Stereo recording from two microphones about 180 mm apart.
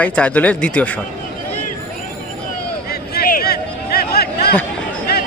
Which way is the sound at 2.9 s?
55° left (ahead or behind).